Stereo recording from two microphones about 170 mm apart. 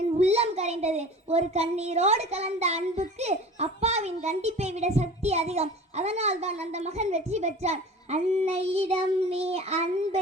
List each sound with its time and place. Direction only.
0.2 s a child's voice: 40° right (ahead or behind)